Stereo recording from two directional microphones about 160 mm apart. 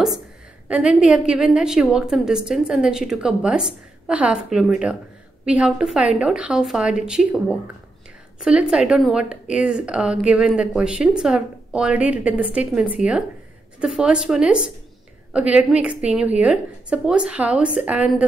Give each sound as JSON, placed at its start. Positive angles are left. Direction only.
{"t": 0.7, "sound": "a woman's voice", "side_deg": -5}